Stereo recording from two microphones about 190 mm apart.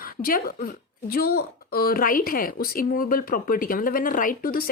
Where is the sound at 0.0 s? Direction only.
50° left (ahead or behind).